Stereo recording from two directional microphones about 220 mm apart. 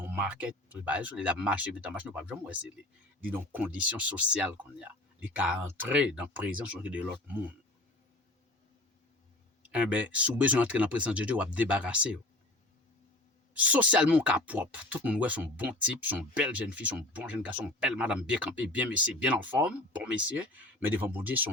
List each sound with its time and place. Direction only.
0.0 s speech: 10° right (ahead or behind)
9.7 s speech: 5° right (ahead or behind)
13.5 s speech: 5° right (ahead or behind)